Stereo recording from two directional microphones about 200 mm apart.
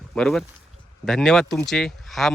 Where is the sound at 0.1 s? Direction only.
Centre (ahead or behind).